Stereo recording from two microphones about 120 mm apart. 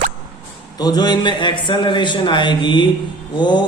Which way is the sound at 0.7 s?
35° left (ahead or behind).